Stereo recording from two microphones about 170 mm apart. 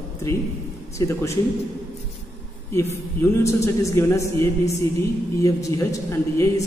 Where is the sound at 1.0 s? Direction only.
15° left (ahead or behind).